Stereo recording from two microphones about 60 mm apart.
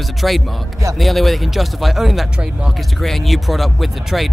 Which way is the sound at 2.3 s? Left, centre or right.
Centre.